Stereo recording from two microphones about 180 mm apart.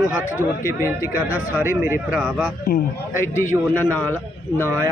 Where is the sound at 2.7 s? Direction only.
55° left (ahead or behind).